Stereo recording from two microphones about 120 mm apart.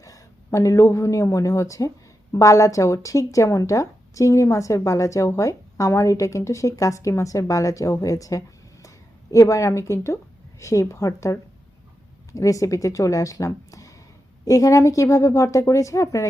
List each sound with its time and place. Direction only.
0.0 s speech: 25° left (ahead or behind)